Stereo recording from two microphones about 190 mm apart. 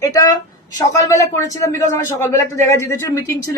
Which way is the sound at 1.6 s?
15° left (ahead or behind).